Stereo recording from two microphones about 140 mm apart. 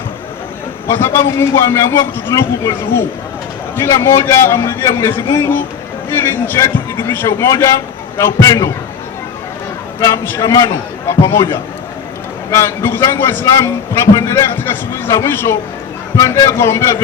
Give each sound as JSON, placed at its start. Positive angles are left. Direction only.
{"t": 0.9, "sound": "a man's voice", "side_deg": 15}
{"t": 10.0, "sound": "a man's voice", "side_deg": 20}